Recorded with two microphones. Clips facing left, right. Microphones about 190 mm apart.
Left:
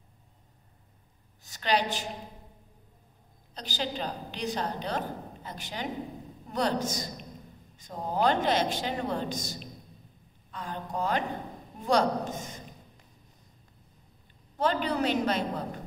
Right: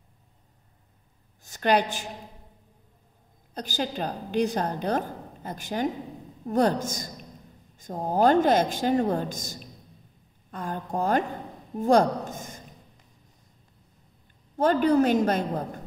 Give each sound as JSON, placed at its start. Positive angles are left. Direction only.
{"t": 1.4, "sound": "a woman's voice", "side_deg": -50}
{"t": 3.5, "sound": "a woman's voice", "side_deg": -45}
{"t": 14.6, "sound": "a woman's voice", "side_deg": -45}